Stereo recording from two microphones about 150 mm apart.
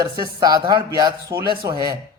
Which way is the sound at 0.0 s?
25° right (ahead or behind).